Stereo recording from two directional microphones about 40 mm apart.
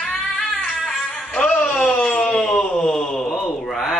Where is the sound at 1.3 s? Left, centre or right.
Left.